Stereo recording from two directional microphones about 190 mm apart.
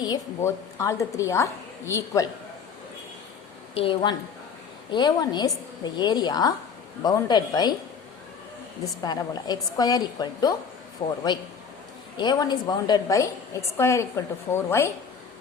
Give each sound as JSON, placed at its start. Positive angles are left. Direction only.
{"t": 0.0, "sound": "a woman's voice", "side_deg": 15}
{"t": 3.8, "sound": "a woman's voice", "side_deg": 30}
{"t": 8.8, "sound": "a woman's voice", "side_deg": 20}